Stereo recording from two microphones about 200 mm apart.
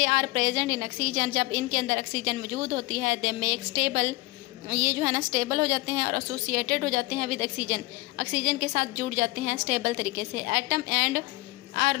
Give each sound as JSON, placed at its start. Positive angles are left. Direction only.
{"t": 0.0, "sound": "a woman's voice", "side_deg": -50}